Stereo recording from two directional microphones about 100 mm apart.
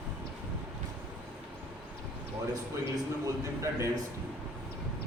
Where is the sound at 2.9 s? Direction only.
30° right (ahead or behind).